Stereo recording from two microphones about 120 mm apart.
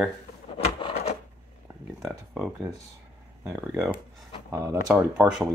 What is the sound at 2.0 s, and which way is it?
Speech, 10° right (ahead or behind).